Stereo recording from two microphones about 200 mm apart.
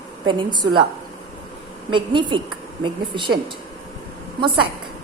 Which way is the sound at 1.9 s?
25° right (ahead or behind).